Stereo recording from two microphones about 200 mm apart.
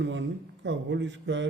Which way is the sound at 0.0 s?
65° right (ahead or behind).